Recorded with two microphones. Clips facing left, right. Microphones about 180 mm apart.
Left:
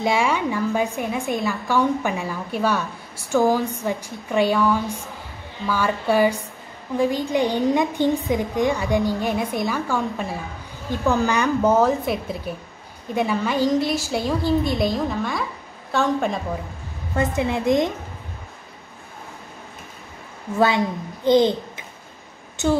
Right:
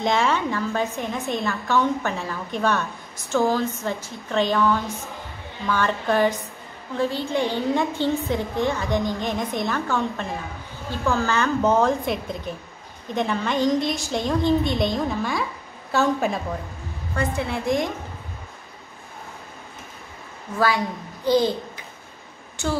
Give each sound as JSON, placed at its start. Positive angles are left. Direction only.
{"t": 0.0, "sound": "a woman's voice", "side_deg": 10}
{"t": 17.4, "sound": "a woman's voice", "side_deg": 20}
{"t": 20.5, "sound": "a child's voice", "side_deg": 25}